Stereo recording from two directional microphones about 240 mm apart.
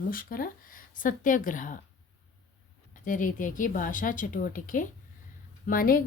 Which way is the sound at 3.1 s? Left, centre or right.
Left.